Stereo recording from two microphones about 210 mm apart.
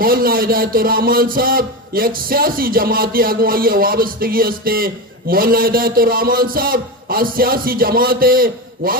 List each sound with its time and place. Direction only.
0.0 s speech: 45° right (ahead or behind)